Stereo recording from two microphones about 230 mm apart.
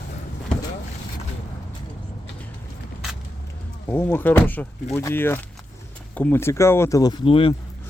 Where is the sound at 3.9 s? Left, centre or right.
Centre.